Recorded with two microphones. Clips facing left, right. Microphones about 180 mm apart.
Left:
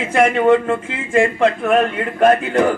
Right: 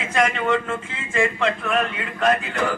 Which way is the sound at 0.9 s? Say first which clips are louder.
Left 6 dB; 55° left (ahead or behind).